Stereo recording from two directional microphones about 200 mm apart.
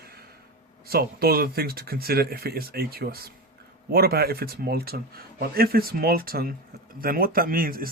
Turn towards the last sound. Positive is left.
turn(degrees=-45)  # may be behind; listen again after turning